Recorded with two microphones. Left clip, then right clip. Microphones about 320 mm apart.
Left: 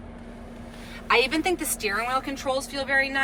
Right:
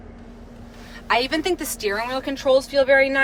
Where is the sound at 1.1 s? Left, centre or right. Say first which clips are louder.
Right 1 dB; right.